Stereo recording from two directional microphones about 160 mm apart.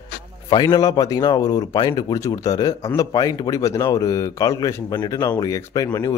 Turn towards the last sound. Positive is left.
turn(degrees=20)  # may be behind; listen again after turning